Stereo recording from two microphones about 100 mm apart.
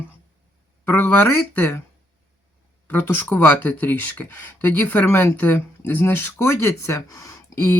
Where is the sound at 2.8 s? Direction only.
20° left (ahead or behind).